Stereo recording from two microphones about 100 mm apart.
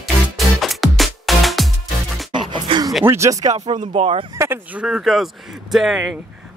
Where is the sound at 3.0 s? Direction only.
30° right (ahead or behind).